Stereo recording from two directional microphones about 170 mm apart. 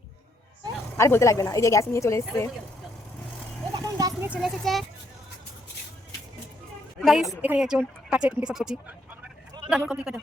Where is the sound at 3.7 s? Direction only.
25° right (ahead or behind).